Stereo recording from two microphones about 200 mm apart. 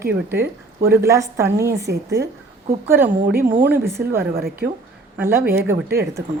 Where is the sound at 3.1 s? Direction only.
45° right (ahead or behind).